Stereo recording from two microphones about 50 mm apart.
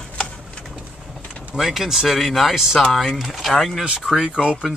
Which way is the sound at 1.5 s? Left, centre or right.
Centre.